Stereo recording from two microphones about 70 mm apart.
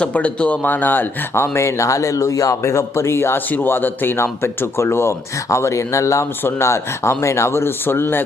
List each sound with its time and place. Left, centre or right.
0.0 s speech: centre; by 8.2 s left